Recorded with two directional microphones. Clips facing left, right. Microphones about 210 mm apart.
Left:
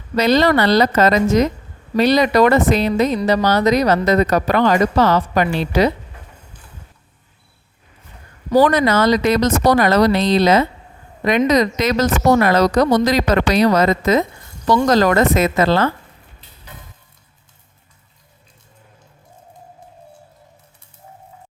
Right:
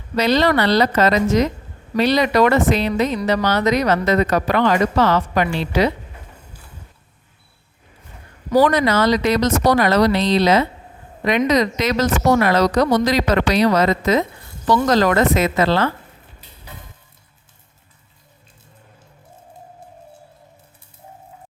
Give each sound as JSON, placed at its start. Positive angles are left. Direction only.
{"t": 0.2, "sound": "speech", "side_deg": 45}
{"t": 8.5, "sound": "speech", "side_deg": 45}